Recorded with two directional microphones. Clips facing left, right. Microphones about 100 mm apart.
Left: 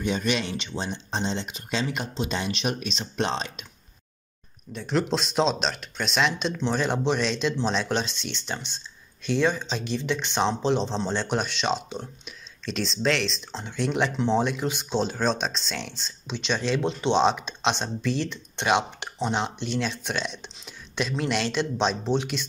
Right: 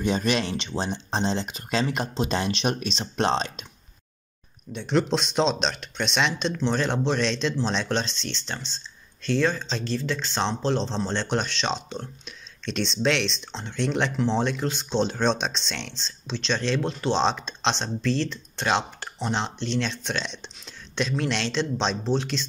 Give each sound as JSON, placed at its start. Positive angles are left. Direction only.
{"t": 0.0, "sound": "speech", "side_deg": -35}
{"t": 0.4, "sound": "speech", "side_deg": 0}
{"t": 2.4, "sound": "speech", "side_deg": 0}
{"t": 4.7, "sound": "speech", "side_deg": 0}
{"t": 19.1, "sound": "speech", "side_deg": 5}